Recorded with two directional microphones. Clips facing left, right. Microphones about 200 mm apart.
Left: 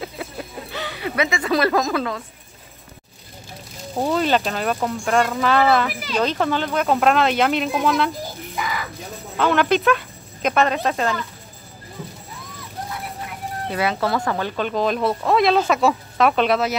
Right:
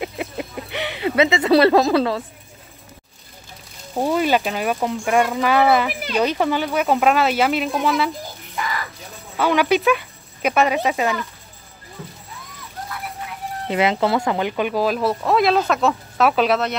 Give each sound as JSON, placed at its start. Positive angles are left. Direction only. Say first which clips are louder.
{"t": 0.0, "sound": "a sound", "louder": "right 4 dB", "side_deg": -20}
{"t": 4.0, "sound": "speech", "louder": "right 1 dB", "side_deg": -10}
{"t": 9.4, "sound": "speech", "louder": "right 1 dB", "side_deg": -10}
{"t": 13.7, "sound": "speech", "louder": "right 3 dB", "side_deg": -20}